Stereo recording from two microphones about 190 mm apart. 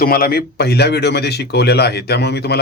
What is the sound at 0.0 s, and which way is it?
Speech, 50° left (ahead or behind).